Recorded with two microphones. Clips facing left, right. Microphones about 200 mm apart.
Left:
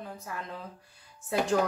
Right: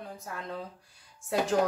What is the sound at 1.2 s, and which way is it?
Speech, centre (ahead or behind).